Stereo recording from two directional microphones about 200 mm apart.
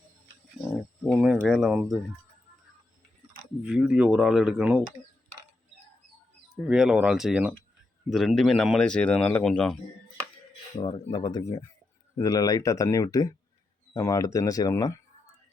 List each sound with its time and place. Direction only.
1.0 s speech: 5° right (ahead or behind)
3.6 s speech: 5° right (ahead or behind)
6.7 s speech: 5° right (ahead or behind)
10.8 s speech: 20° left (ahead or behind)